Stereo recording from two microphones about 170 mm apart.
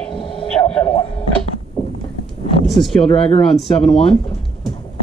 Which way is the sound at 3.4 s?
5° left (ahead or behind).